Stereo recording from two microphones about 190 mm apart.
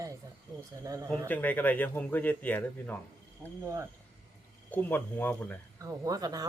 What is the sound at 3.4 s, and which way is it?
Speech, 15° right (ahead or behind).